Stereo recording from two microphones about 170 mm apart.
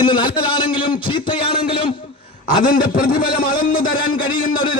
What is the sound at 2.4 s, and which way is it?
A man's voice, 55° left (ahead or behind).